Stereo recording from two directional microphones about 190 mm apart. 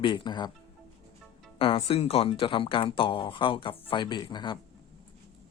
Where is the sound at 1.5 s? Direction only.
30° left (ahead or behind).